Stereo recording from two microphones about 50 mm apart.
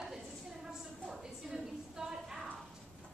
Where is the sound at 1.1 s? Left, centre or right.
Centre.